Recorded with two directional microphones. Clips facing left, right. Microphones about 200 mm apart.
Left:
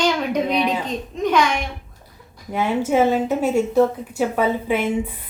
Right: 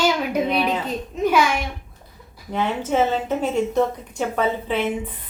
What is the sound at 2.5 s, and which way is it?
A woman's voice, 10° left (ahead or behind).